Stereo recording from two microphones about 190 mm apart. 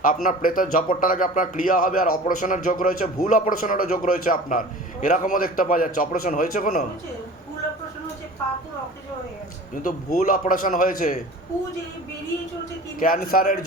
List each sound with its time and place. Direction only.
0.0 s a man's voice: 45° left (ahead or behind)
9.8 s a man's voice: 45° left (ahead or behind)
13.0 s a man's voice: 45° left (ahead or behind)